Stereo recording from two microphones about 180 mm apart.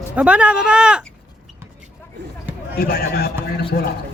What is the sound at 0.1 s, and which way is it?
Speech, 5° right (ahead or behind).